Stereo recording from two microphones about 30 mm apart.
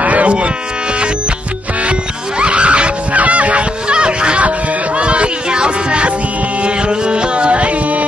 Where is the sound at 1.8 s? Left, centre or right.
Right.